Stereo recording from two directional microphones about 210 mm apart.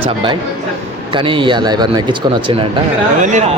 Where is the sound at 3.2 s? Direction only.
35° right (ahead or behind).